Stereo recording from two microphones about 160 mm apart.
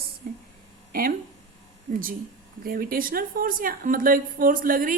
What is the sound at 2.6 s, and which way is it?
A woman's voice, 65° right (ahead or behind).